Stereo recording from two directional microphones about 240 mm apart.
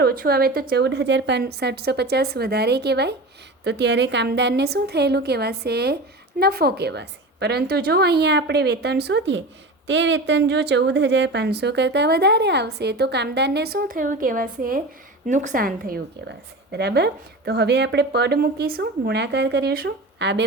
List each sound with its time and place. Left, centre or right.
0.0 s a woman's voice: right